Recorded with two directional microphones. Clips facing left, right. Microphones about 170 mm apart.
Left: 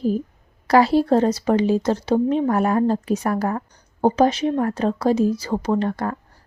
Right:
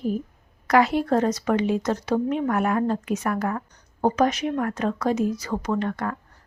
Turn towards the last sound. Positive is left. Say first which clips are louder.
# left 4 dB
turn(degrees=35)  # may be behind; listen again after turning